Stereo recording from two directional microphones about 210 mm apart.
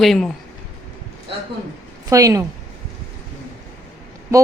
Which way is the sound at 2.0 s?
15° right (ahead or behind).